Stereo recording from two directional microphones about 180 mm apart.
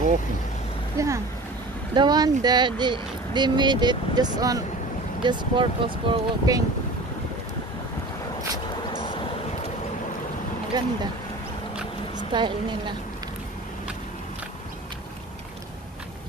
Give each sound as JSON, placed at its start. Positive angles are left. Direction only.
{"t": 0.9, "sound": "speech", "side_deg": -15}
{"t": 10.8, "sound": "speech", "side_deg": -20}
{"t": 12.3, "sound": "speech", "side_deg": -25}